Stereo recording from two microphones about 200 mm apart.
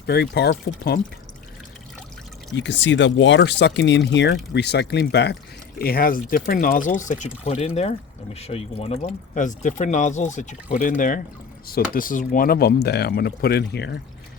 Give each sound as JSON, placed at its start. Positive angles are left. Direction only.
{"t": 0.0, "sound": "speech", "side_deg": 55}
{"t": 2.5, "sound": "speech", "side_deg": 60}
{"t": 5.8, "sound": "speech", "side_deg": 50}